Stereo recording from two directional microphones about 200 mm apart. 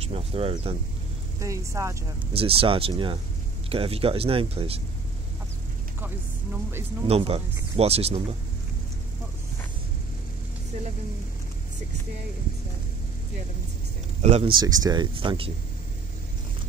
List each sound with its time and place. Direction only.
0.1 s speech: 30° right (ahead or behind)
1.4 s speech: 15° right (ahead or behind)
2.3 s speech: 30° right (ahead or behind)
7.1 s speech: 30° right (ahead or behind)
14.2 s speech: 30° right (ahead or behind)